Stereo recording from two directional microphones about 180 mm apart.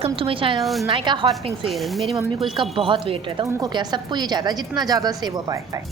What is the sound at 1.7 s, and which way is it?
Speech, centre (ahead or behind).